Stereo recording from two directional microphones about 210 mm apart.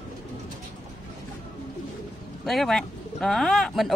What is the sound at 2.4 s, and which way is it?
Speech, centre (ahead or behind).